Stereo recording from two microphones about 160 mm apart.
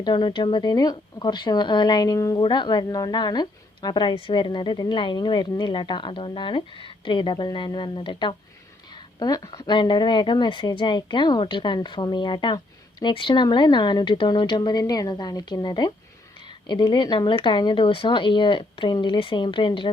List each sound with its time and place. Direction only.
0.0 s speech: 30° left (ahead or behind)